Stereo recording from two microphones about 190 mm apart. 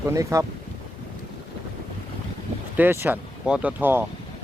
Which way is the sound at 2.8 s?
10° right (ahead or behind).